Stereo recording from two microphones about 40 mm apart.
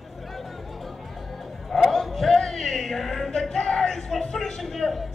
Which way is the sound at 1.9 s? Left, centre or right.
Centre.